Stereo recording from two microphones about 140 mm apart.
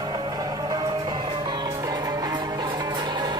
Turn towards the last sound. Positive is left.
turn(degrees=-30)  # may be behind; listen again after turning